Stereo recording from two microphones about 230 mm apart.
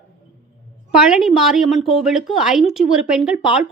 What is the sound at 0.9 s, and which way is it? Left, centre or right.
A woman's voice, centre.